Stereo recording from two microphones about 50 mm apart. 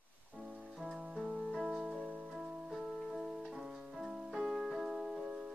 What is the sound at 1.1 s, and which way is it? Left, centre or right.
Keyboard, right.